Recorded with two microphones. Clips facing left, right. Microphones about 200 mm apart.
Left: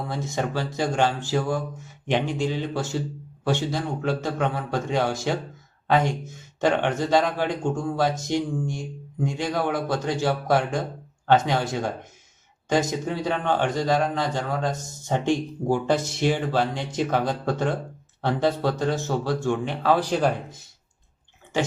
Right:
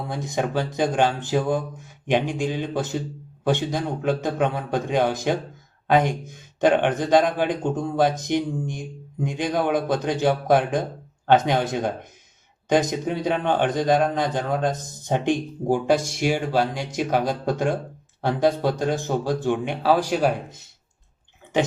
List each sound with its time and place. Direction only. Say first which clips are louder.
0.1 s a man's voice: right 4 dB; 15° right (ahead or behind)